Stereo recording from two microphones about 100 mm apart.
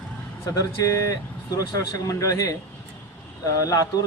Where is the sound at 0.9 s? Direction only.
35° left (ahead or behind).